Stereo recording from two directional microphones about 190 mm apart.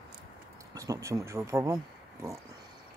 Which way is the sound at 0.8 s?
15° right (ahead or behind).